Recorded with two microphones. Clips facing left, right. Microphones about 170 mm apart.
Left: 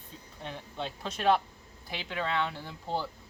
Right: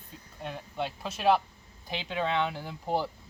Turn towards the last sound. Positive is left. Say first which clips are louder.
# right 4 dB
turn(degrees=-15)  # may be behind; listen again after turning